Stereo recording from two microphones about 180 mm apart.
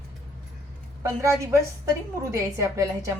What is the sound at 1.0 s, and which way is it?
A woman's voice, 15° right (ahead or behind).